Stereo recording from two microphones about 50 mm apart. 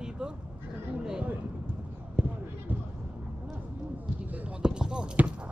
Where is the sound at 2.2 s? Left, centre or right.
Right.